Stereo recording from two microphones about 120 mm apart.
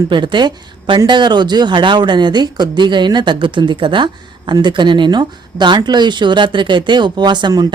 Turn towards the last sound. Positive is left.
turn(degrees=-35)  # may be behind; listen again after turning